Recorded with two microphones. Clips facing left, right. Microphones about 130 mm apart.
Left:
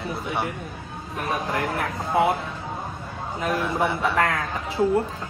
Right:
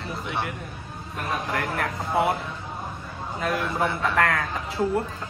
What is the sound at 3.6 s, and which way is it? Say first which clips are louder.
Speech: left 2 dB; 15° left (ahead or behind).